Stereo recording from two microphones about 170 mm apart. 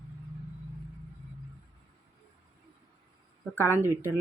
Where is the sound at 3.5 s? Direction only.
15° left (ahead or behind).